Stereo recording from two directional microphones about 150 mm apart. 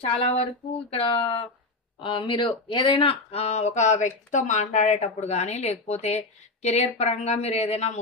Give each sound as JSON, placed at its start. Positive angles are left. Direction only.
{"t": 0.0, "sound": "speech", "side_deg": 40}